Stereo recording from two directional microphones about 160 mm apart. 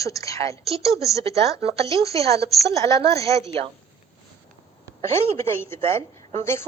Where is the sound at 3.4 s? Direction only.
35° right (ahead or behind).